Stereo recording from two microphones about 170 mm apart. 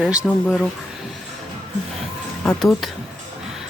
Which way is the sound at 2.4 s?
5° left (ahead or behind).